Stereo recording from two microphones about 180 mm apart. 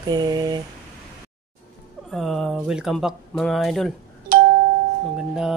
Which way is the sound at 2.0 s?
Centre (ahead or behind).